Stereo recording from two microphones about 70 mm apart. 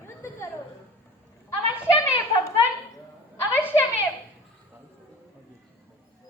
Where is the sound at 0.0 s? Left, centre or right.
Left.